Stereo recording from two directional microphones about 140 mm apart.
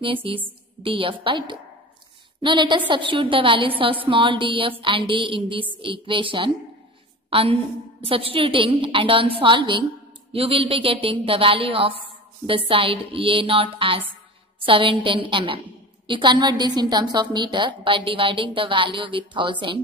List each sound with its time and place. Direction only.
0.0 s a woman's voice: 40° right (ahead or behind)